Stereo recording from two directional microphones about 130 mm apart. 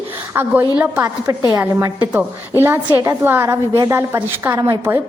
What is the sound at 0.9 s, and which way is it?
A woman's voice, 25° right (ahead or behind).